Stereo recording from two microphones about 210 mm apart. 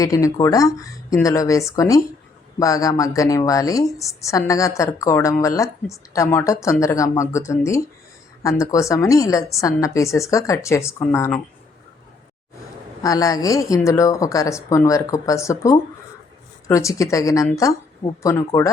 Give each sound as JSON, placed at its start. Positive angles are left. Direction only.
{"t": 0.0, "sound": "speech", "side_deg": 15}
{"t": 13.0, "sound": "speech", "side_deg": 15}